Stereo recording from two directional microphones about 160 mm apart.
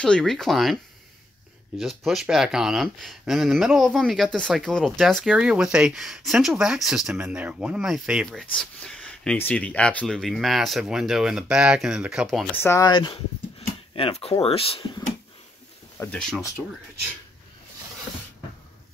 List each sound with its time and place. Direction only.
0.0 s speech: 5° left (ahead or behind)
1.8 s speech: centre (ahead or behind)
12.5 s speech: 15° left (ahead or behind)
12.8 s speech: 30° left (ahead or behind)
16.0 s speech: 5° left (ahead or behind)